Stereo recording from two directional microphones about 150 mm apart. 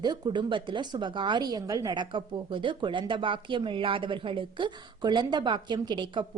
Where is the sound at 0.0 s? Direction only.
30° right (ahead or behind).